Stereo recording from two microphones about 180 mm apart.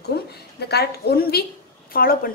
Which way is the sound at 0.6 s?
65° left (ahead or behind).